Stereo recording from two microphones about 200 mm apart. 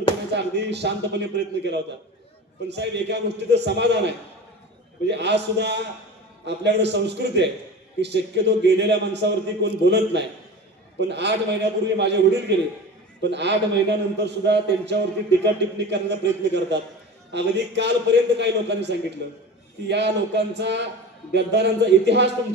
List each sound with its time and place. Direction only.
0.3 s a man's voice: 60° right (ahead or behind)